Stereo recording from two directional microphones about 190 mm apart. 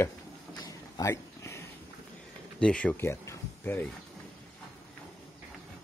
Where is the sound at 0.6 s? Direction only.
20° left (ahead or behind).